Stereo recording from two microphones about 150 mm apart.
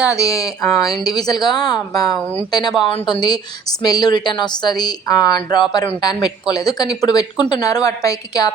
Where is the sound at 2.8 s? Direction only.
35° left (ahead or behind).